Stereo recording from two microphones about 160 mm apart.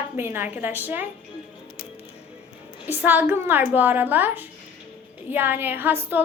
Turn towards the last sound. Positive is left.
turn(degrees=-10)  # may be behind; listen again after turning